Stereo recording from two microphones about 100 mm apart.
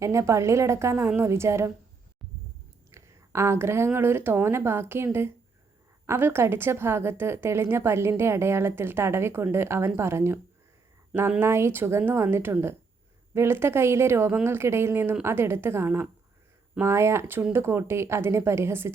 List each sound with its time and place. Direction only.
0.0 s a woman's voice: 30° right (ahead or behind)
2.9 s a woman's voice: 30° right (ahead or behind)